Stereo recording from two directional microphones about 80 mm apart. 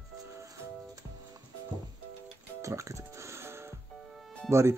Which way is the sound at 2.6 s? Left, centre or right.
Right.